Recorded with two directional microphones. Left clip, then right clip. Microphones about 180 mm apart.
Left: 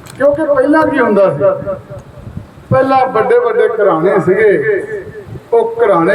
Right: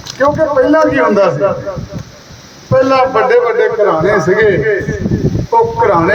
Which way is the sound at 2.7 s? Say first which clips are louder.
Right 1 dB; 60° left (ahead or behind).